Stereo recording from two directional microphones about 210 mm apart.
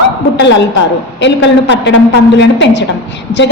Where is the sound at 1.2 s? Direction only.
60° left (ahead or behind).